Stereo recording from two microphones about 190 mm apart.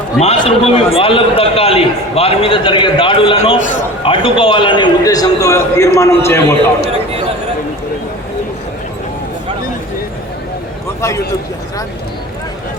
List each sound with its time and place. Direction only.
0.2 s a man's voice: 30° left (ahead or behind); by 6.4 s 15° left (ahead or behind)